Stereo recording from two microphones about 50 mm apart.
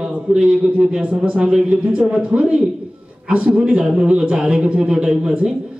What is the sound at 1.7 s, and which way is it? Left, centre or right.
A man's voice, right.